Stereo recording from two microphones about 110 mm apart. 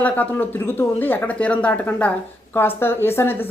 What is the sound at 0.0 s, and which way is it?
A woman's voice, 15° left (ahead or behind).